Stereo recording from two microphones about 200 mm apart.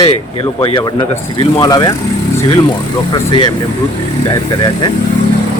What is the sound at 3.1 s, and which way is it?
Speech, 20° left (ahead or behind).